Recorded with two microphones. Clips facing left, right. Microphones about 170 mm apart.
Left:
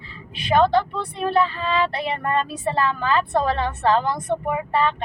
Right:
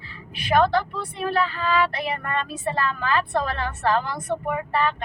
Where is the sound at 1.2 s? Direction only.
30° left (ahead or behind).